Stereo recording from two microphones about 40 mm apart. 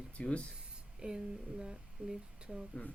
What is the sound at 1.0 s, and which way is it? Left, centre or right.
Speech, right.